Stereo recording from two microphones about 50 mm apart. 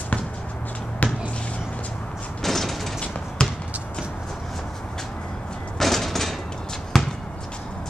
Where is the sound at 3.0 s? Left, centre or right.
Left.